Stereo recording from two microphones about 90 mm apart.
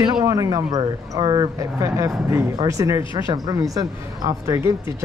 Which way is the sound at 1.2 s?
60° right (ahead or behind).